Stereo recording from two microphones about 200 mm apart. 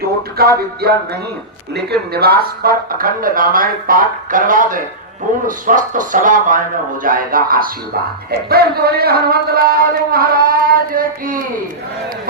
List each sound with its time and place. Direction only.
0.4 s speech: 50° right (ahead or behind)